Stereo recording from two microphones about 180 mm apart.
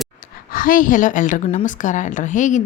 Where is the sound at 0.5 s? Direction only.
50° left (ahead or behind).